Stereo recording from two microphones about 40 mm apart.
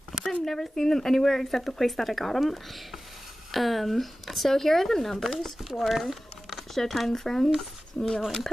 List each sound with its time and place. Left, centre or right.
0.1 s a sound: centre
0.5 s speech: centre
8.0 s speech: left